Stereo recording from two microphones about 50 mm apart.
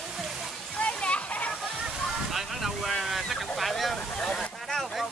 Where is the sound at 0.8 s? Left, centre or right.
Left.